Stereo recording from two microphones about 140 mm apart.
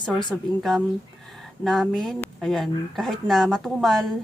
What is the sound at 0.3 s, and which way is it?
Speech, centre (ahead or behind).